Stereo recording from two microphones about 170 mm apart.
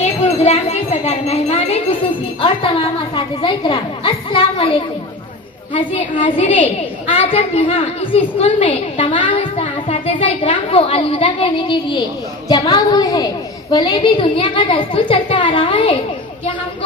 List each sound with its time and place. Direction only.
0.0 s a woman's voice: 40° left (ahead or behind)
5.7 s a woman's voice: 30° left (ahead or behind)